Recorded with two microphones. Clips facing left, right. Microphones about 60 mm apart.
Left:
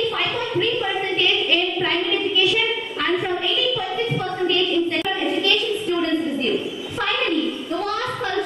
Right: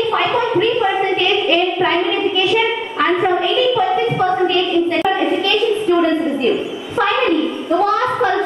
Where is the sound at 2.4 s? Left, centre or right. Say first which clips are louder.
Right 5 dB; centre.